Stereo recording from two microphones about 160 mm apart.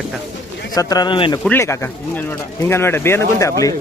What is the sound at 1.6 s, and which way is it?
A man's voice, 15° left (ahead or behind).